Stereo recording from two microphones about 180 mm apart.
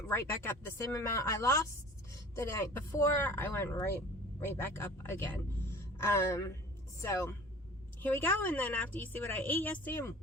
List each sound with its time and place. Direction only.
0.1 s speech: 15° left (ahead or behind)